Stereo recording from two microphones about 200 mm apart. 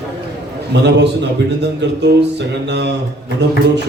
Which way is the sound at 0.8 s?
60° right (ahead or behind).